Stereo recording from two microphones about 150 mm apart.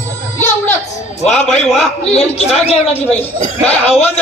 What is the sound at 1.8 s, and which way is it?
A man's voice, 45° left (ahead or behind).